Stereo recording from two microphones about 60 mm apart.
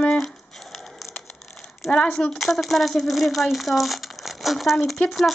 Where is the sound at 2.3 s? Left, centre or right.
Centre.